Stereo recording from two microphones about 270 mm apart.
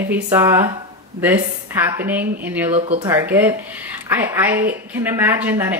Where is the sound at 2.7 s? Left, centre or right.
Right.